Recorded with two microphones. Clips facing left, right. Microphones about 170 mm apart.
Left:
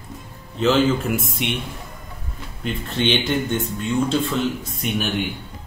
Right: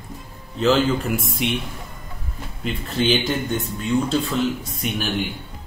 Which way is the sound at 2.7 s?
Centre (ahead or behind).